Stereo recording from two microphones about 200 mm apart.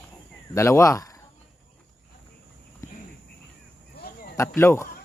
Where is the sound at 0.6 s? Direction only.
15° left (ahead or behind).